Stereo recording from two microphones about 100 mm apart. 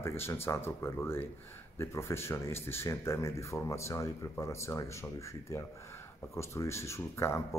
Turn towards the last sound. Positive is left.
turn(degrees=25)  # may be behind; listen again after turning